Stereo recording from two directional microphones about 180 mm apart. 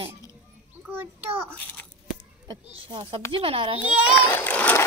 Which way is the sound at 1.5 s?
10° left (ahead or behind).